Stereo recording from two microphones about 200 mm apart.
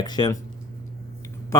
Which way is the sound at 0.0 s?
20° left (ahead or behind).